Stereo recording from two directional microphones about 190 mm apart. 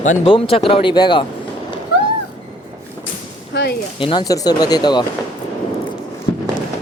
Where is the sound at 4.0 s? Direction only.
25° left (ahead or behind).